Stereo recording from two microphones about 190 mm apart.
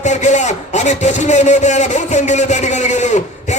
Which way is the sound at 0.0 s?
40° left (ahead or behind).